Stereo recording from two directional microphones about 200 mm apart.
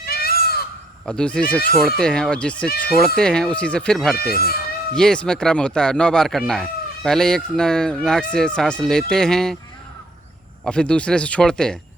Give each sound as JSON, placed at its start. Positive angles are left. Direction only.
{"t": 0.0, "sound": "crow", "side_deg": 50}
{"t": 1.0, "sound": "speech", "side_deg": 5}
{"t": 4.2, "sound": "speech", "side_deg": 50}
{"t": 4.9, "sound": "speech", "side_deg": 5}
{"t": 10.6, "sound": "speech", "side_deg": 5}